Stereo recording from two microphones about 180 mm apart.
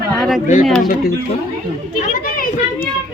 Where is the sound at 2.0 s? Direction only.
50° left (ahead or behind).